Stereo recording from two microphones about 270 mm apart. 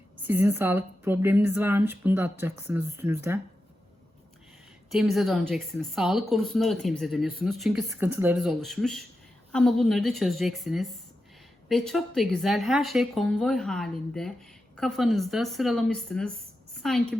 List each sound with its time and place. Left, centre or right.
0.3 s speech: centre
4.9 s a woman's voice: centre